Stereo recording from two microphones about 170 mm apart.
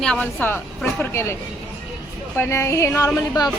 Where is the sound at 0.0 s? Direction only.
5° left (ahead or behind).